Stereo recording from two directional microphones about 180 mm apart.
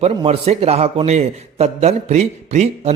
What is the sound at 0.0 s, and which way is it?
A man's voice, 35° right (ahead or behind).